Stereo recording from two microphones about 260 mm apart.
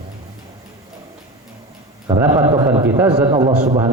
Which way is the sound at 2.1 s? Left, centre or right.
Centre.